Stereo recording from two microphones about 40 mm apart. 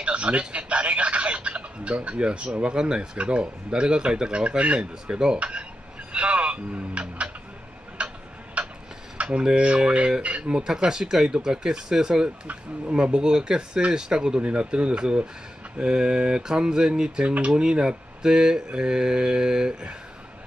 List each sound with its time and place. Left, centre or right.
0.0 s speech: right
5.0 s speech: centre
5.4 s speech: right
8.0 s tick-tock: right
8.6 s a sound: right
9.6 s speech: right
10.5 s speech: centre